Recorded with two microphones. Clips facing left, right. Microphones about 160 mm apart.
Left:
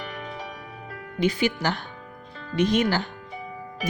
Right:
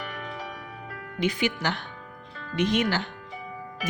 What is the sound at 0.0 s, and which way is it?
Music, 20° left (ahead or behind).